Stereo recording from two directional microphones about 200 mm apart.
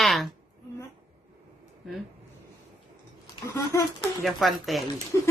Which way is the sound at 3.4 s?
15° left (ahead or behind).